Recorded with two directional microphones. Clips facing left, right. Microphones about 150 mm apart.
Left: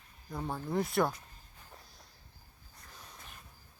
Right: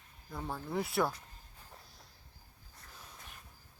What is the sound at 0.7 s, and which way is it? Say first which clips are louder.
Speech: left 2 dB; 5° right (ahead or behind).